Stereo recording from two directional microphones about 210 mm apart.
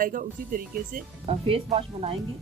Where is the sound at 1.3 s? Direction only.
25° right (ahead or behind).